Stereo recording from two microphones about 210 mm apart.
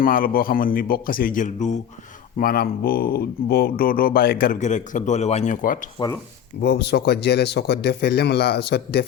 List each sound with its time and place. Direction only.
0.0 s speech: 45° left (ahead or behind)
2.4 s speech: 45° left (ahead or behind)
6.6 s speech: 50° left (ahead or behind)